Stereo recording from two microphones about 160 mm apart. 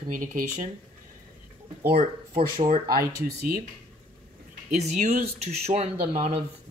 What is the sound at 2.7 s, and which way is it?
Speech, 65° right (ahead or behind).